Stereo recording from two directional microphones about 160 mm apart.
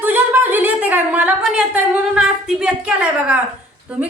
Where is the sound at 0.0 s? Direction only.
10° right (ahead or behind).